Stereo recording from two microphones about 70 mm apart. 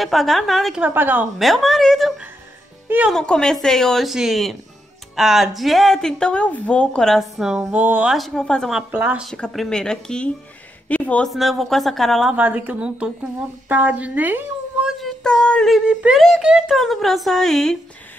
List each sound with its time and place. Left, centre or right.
0.0 s speech: centre
0.8 s a woman's voice: right
1.4 s speech: centre
7.3 s speech: centre
7.7 s a woman's voice: right
8.4 s speech: centre
8.9 s a woman's voice: right
9.5 s speech: centre
11.3 s speech: centre
12.4 s a woman's voice: right
14.9 s female singing: centre
15.2 s speech: centre
15.9 s speech: centre
16.7 s speech: centre